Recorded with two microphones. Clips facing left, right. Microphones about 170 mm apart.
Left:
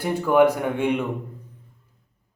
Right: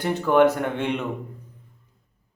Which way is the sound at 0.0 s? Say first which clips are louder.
Even; 10° left (ahead or behind).